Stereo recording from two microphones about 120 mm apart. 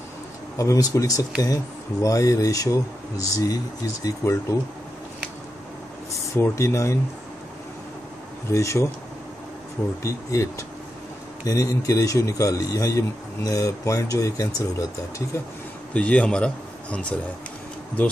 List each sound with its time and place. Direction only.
0.6 s a man's voice: 30° left (ahead or behind)
6.3 s a man's voice: 25° left (ahead or behind)
8.5 s a man's voice: 25° left (ahead or behind)
10.0 s a man's voice: 25° left (ahead or behind)
15.9 s speech: 10° left (ahead or behind)